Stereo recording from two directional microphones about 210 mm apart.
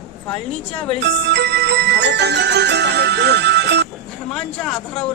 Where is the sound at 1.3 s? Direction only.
55° right (ahead or behind).